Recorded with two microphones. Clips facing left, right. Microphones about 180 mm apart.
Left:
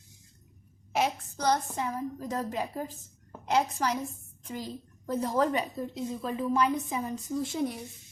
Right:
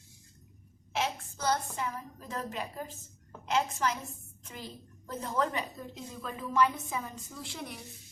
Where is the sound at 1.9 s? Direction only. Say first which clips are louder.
Left 7 dB; 40° left (ahead or behind).